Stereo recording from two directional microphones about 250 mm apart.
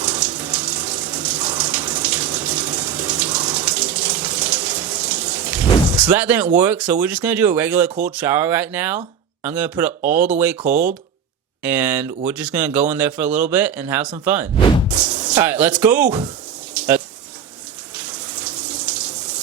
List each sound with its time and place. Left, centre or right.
0.0 s water tap: centre
6.6 s speech: centre
16.7 s water tap: centre
17.9 s water: centre